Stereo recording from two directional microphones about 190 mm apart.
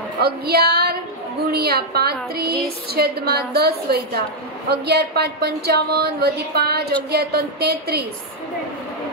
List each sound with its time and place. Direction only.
0.2 s a woman's voice: 55° right (ahead or behind)